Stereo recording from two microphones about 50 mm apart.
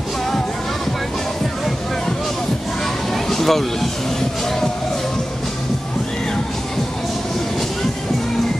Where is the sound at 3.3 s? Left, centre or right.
Centre.